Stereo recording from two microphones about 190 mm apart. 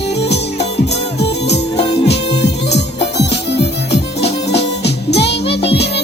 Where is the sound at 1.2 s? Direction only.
60° left (ahead or behind).